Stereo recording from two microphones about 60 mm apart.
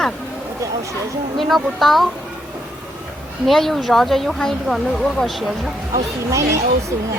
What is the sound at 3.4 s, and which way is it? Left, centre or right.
Speech, centre.